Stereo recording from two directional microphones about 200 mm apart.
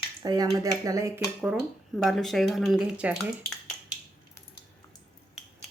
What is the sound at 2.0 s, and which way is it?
Speech, centre (ahead or behind).